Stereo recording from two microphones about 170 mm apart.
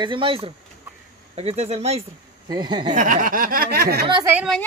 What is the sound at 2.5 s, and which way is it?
Speech, 25° right (ahead or behind).